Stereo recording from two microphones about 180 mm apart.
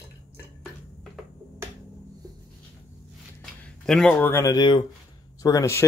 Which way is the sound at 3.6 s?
5° left (ahead or behind).